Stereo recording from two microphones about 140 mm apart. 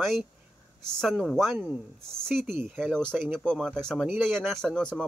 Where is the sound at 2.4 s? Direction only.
15° right (ahead or behind).